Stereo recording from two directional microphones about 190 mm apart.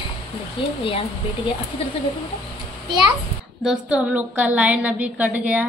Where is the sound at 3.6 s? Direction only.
5° right (ahead or behind).